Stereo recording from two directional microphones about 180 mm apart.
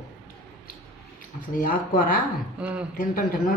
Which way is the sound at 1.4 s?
45° left (ahead or behind).